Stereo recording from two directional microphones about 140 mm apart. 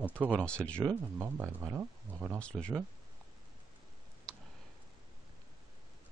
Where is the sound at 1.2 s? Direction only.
20° right (ahead or behind).